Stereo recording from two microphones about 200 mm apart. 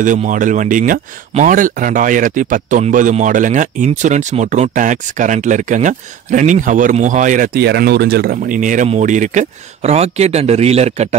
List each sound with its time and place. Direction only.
0.0 s speech: 40° right (ahead or behind)